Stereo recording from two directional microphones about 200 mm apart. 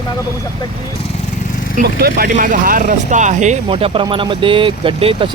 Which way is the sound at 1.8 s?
50° right (ahead or behind).